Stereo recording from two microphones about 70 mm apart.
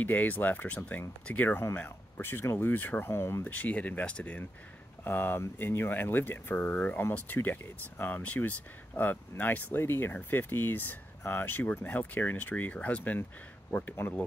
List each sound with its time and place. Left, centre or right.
0.0 s speech: left
3.4 s speech: left